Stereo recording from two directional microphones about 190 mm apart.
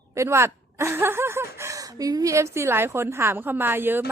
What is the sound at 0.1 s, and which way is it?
A woman's voice, 15° right (ahead or behind).